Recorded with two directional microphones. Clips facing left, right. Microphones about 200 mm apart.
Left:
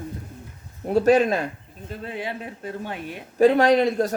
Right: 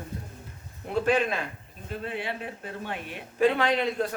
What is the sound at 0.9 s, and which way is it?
Speech, 40° left (ahead or behind).